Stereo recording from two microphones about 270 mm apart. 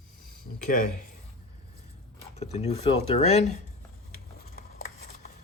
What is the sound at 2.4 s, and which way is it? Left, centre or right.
Speech, left.